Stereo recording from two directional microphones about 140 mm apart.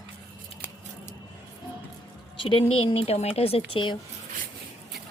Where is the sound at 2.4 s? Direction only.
40° left (ahead or behind).